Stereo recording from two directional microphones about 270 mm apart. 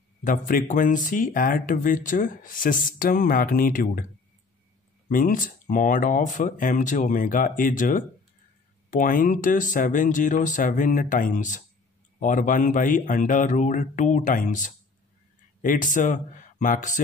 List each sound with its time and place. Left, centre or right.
0.2 s speech: left
5.0 s speech: left